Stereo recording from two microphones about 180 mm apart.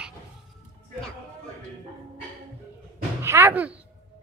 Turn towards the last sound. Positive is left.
turn(degrees=-10)  # may be behind; listen again after turning